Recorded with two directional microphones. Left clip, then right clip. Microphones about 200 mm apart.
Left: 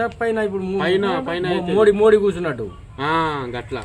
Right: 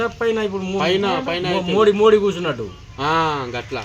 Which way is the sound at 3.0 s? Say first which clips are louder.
Right 1 dB; 10° left (ahead or behind).